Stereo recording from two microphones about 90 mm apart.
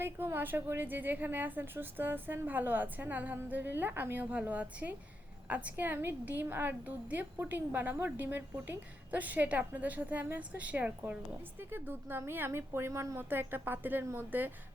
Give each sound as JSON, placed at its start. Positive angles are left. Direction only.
{"t": 0.0, "sound": "a woman's voice", "side_deg": -25}